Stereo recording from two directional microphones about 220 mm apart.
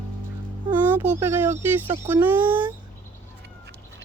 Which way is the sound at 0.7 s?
10° right (ahead or behind).